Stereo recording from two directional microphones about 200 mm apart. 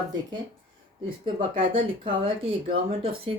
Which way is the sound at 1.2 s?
25° right (ahead or behind).